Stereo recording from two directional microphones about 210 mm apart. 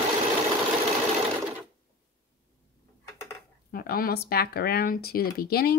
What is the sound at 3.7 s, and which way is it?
A woman's voice, 45° left (ahead or behind).